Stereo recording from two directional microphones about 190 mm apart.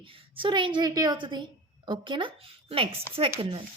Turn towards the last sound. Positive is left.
turn(degrees=-30)  # may be behind; listen again after turning